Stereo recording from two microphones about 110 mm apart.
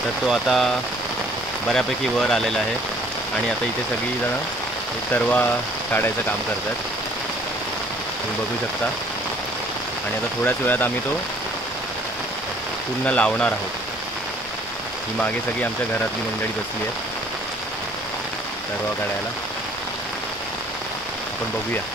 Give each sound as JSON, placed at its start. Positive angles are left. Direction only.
{"t": 0.3, "sound": "speech", "side_deg": 0}
{"t": 1.7, "sound": "speech", "side_deg": 5}
{"t": 5.1, "sound": "speech", "side_deg": 15}
{"t": 10.4, "sound": "speech", "side_deg": 15}
{"t": 13.0, "sound": "speech", "side_deg": 10}
{"t": 15.1, "sound": "speech", "side_deg": 15}